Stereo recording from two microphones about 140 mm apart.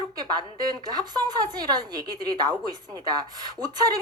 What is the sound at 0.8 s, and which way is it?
A woman's voice, 30° right (ahead or behind).